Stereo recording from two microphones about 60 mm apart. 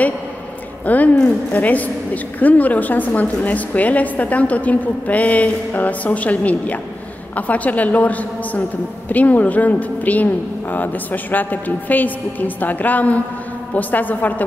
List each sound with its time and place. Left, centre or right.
0.8 s a woman's voice: left